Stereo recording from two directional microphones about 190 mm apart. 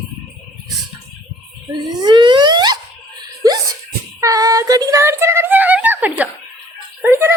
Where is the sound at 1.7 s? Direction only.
20° right (ahead or behind).